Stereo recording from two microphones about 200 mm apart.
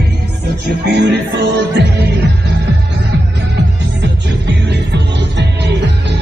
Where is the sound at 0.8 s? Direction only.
55° right (ahead or behind).